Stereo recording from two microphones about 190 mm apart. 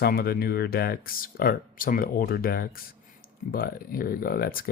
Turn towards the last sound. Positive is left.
turn(degrees=50)  # may be behind; listen again after turning